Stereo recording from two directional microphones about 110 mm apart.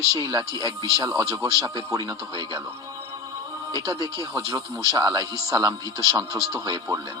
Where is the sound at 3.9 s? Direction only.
30° left (ahead or behind).